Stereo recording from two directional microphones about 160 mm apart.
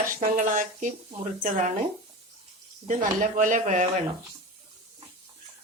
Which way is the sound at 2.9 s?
55° right (ahead or behind).